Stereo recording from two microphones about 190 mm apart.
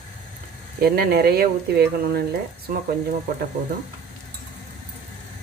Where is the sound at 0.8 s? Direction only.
55° right (ahead or behind).